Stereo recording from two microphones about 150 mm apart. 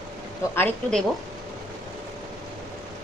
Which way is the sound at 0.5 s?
10° left (ahead or behind).